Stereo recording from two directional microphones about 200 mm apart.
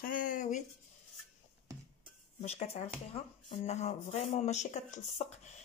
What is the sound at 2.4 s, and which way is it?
Speech, 30° left (ahead or behind).